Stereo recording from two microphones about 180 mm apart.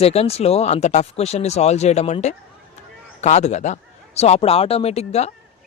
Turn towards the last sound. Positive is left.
turn(degrees=35)  # may be behind; listen again after turning